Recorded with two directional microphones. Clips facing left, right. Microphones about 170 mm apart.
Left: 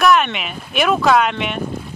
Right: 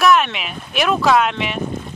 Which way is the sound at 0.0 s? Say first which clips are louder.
Even; centre (ahead or behind).